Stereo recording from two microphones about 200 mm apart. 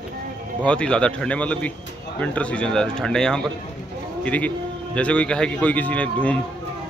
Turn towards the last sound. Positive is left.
turn(degrees=5)  # may be behind; listen again after turning